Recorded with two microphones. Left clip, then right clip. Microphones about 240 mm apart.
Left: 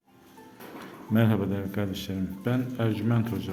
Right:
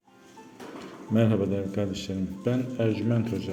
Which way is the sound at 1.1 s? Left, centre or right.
Centre.